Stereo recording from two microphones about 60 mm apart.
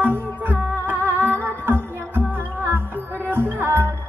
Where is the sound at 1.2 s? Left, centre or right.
Right.